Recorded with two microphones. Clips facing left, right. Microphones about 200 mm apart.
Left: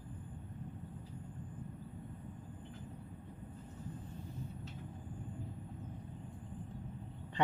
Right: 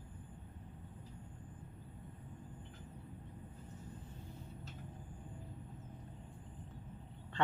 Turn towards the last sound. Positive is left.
turn(degrees=15)  # may be behind; listen again after turning